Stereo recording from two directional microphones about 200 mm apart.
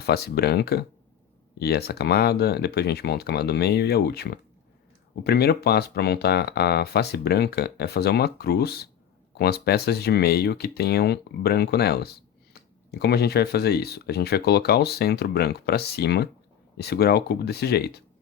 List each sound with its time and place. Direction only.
0.0 s speech: 50° left (ahead or behind)